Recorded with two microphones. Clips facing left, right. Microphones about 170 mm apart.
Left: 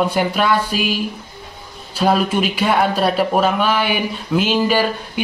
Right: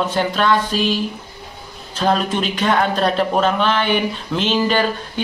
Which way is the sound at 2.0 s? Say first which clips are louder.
Left 2 dB; 10° left (ahead or behind).